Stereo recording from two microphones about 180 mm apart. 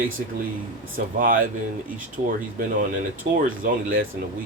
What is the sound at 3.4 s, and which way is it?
Speech, 50° right (ahead or behind).